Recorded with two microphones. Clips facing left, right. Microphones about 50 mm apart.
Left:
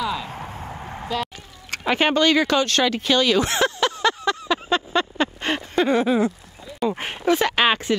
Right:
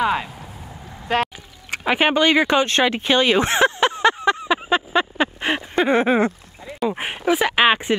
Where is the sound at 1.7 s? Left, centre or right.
Centre.